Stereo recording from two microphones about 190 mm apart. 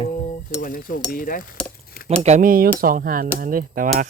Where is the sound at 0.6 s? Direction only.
45° left (ahead or behind).